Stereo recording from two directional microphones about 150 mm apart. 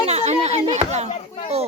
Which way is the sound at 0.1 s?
45° right (ahead or behind).